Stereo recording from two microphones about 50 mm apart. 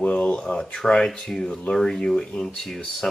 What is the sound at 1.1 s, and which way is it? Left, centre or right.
Speech, centre.